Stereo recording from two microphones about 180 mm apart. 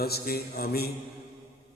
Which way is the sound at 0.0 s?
55° left (ahead or behind).